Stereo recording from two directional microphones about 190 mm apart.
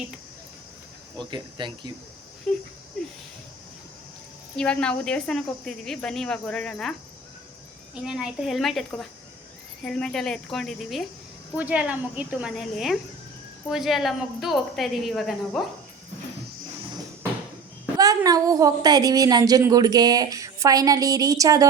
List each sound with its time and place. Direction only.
1.3 s a woman's voice: 25° right (ahead or behind)
2.5 s speech: 5° left (ahead or behind)
4.5 s speech: 5° left (ahead or behind)
8.0 s speech: 5° right (ahead or behind)
17.9 s a woman's voice: 20° right (ahead or behind)